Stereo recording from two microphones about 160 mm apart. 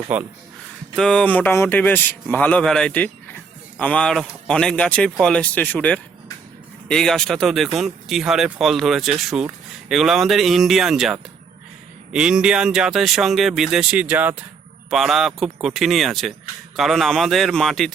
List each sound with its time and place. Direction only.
0.1 s speech: 10° right (ahead or behind)
0.9 s a man's voice: 5° left (ahead or behind)